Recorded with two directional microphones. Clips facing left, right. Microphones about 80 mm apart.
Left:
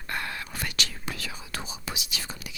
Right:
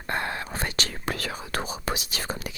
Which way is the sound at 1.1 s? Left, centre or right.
Right.